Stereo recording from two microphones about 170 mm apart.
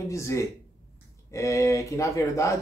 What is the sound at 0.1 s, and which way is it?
Speech, 15° left (ahead or behind).